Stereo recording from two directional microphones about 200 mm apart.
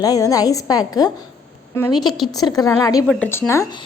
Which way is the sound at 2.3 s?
20° left (ahead or behind).